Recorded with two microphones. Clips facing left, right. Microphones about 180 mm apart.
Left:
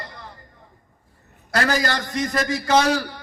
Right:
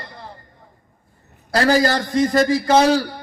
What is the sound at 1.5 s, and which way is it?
A man's voice, 30° right (ahead or behind).